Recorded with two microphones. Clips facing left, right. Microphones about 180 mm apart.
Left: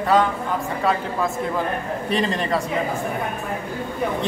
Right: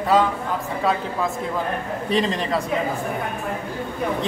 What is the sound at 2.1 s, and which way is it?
Speech, centre (ahead or behind).